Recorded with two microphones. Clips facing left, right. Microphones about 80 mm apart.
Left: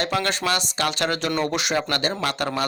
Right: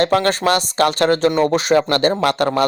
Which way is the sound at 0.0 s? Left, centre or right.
Right.